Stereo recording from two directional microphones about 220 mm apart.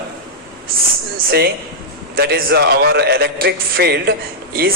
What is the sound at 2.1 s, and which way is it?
A man's voice, 45° right (ahead or behind).